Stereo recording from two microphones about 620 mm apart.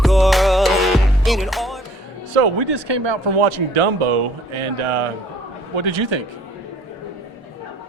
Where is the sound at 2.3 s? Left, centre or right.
Right.